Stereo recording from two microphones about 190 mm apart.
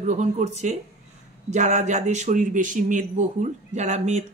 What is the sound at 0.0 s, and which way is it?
A man's voice, 40° right (ahead or behind).